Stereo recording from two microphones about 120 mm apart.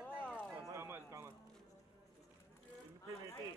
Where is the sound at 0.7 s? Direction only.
20° right (ahead or behind).